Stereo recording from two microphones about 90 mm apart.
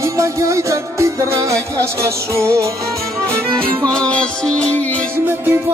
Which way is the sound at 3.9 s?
10° left (ahead or behind).